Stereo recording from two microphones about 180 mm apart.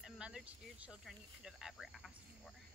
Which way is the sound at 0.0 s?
5° right (ahead or behind).